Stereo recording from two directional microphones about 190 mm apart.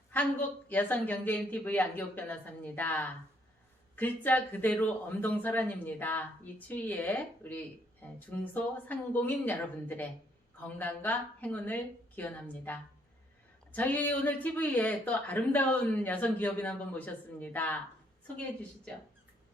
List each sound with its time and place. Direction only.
0.1 s a woman's voice: 10° left (ahead or behind)